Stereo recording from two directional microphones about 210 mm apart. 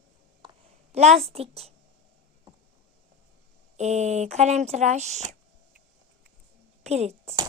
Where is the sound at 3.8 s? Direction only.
35° right (ahead or behind).